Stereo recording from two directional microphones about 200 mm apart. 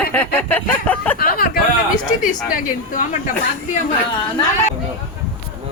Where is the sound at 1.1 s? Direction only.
45° left (ahead or behind).